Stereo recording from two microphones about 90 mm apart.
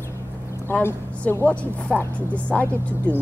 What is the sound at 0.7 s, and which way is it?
A woman's voice, 25° left (ahead or behind).